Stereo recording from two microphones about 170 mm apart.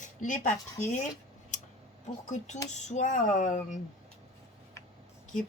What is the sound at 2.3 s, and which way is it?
A woman's voice, 45° left (ahead or behind).